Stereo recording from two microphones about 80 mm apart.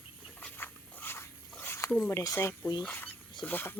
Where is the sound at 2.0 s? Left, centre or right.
Left.